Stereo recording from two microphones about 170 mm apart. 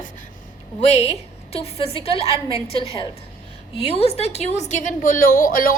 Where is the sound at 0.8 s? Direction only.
40° left (ahead or behind).